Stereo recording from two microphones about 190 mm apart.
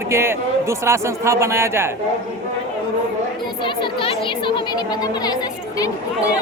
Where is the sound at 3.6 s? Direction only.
25° left (ahead or behind).